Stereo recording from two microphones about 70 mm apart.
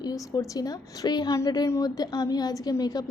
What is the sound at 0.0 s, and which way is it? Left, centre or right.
A woman's voice, left.